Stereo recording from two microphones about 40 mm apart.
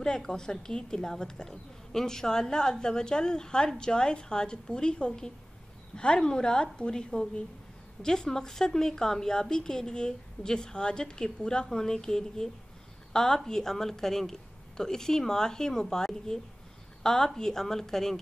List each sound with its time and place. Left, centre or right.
0.0 s a woman's voice: centre